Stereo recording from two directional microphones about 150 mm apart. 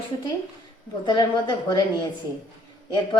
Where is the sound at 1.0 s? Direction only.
30° left (ahead or behind).